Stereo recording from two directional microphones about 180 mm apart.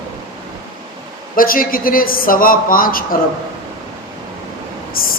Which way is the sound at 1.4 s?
50° left (ahead or behind).